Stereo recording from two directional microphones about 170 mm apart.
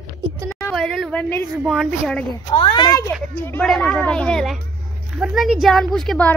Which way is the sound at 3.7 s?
Centre (ahead or behind).